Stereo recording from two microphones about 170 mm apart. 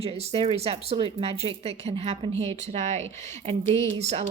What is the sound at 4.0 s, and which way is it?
Speech, 40° right (ahead or behind).